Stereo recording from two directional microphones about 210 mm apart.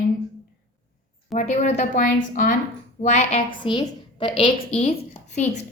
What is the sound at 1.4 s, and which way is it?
A woman's voice, 30° left (ahead or behind).